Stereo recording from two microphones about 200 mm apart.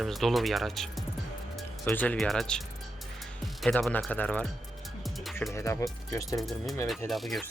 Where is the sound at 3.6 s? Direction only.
5° left (ahead or behind).